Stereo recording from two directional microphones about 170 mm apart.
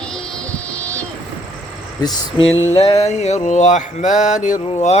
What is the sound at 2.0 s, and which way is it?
Speech, 25° left (ahead or behind).